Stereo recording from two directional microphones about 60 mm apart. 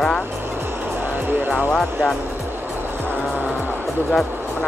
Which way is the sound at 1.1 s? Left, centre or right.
Right.